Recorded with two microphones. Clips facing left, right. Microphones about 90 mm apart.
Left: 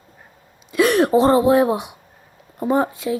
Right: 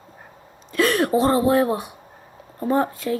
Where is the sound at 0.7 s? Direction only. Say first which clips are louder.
Left 4 dB; 15° left (ahead or behind).